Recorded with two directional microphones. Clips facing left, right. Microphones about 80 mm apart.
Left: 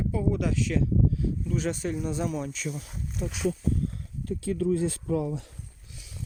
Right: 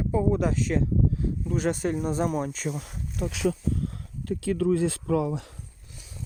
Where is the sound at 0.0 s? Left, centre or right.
Right.